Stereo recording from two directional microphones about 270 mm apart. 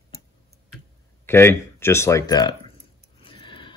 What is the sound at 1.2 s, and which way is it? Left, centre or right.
Speech, centre.